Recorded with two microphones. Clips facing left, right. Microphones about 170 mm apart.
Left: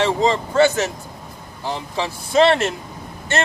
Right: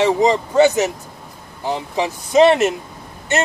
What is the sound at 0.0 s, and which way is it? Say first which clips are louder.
Speech: right 3 dB; 15° right (ahead or behind).